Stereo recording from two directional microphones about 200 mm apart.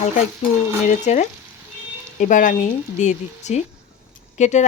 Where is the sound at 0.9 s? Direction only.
35° left (ahead or behind).